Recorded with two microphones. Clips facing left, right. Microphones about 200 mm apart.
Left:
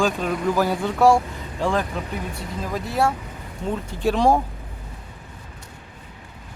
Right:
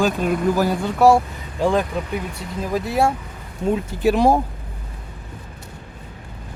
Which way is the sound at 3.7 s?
5° right (ahead or behind).